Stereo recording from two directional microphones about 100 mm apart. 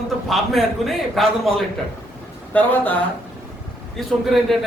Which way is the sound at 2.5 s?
15° left (ahead or behind).